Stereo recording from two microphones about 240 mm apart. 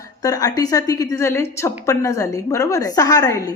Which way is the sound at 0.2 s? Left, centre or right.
Centre.